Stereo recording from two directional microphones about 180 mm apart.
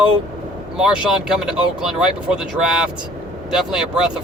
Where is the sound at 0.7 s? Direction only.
5° right (ahead or behind).